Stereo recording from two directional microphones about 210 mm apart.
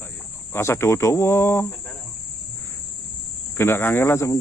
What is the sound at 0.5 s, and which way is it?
Speech, 10° left (ahead or behind).